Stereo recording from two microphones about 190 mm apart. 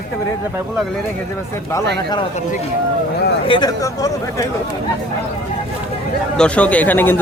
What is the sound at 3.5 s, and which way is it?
Speech, 20° left (ahead or behind).